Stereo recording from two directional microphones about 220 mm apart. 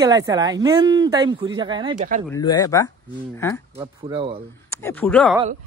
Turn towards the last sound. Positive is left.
turn(degrees=5)  # may be behind; listen again after turning